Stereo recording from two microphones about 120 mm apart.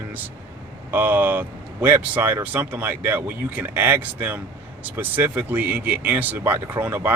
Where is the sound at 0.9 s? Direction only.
15° right (ahead or behind).